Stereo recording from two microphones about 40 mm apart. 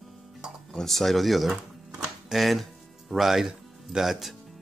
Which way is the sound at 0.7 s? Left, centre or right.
Centre.